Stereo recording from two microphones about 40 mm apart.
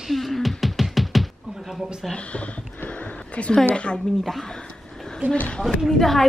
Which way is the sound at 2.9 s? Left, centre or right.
Left.